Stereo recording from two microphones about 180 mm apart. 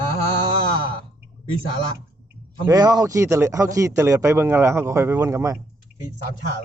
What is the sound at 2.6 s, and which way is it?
Speech, 20° right (ahead or behind).